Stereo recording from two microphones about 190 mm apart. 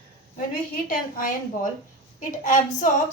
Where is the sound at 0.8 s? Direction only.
45° left (ahead or behind).